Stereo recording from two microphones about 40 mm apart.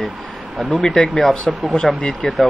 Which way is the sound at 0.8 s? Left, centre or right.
Centre.